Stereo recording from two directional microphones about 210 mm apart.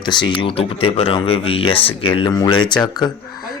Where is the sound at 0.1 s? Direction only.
20° left (ahead or behind).